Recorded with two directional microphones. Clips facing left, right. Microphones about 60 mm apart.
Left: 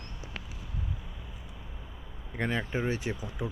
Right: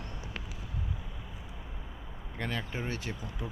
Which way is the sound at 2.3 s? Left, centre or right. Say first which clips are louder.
Left 5 dB; left.